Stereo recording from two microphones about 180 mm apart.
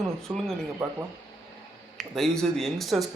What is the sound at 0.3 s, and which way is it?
Speech, 5° right (ahead or behind).